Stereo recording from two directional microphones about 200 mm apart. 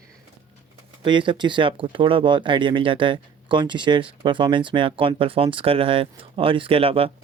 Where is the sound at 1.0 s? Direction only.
25° right (ahead or behind).